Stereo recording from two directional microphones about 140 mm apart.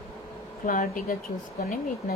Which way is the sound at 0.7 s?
75° left (ahead or behind).